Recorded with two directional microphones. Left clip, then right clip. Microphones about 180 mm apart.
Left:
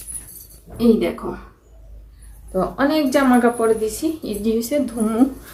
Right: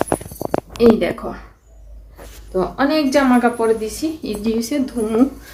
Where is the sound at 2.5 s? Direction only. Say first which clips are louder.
Right 1 dB; centre (ahead or behind).